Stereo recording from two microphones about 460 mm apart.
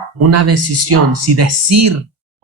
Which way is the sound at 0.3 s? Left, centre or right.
Right.